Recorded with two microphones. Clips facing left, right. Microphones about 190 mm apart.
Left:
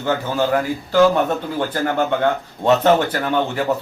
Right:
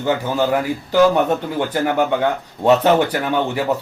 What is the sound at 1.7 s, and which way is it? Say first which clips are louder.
A man's voice: right 2 dB; 15° right (ahead or behind).